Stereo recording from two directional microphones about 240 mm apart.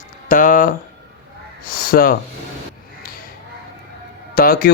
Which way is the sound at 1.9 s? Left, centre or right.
Left.